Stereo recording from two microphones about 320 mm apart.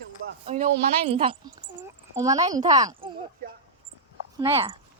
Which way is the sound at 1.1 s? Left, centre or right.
Centre.